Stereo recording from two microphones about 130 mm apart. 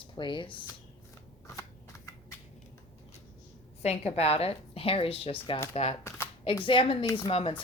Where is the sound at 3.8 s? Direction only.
50° left (ahead or behind).